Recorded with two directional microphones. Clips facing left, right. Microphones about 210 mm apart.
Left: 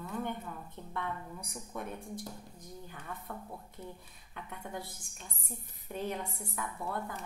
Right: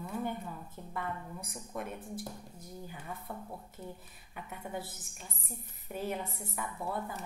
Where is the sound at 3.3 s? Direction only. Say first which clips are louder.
Right 1 dB; 10° right (ahead or behind).